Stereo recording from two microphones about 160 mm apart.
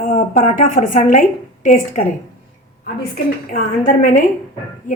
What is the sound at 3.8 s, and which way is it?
Speech, 60° left (ahead or behind).